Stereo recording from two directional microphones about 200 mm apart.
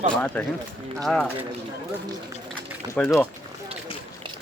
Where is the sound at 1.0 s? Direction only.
Centre (ahead or behind).